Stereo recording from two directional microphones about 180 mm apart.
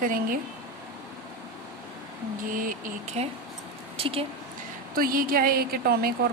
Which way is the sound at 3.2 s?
35° right (ahead or behind).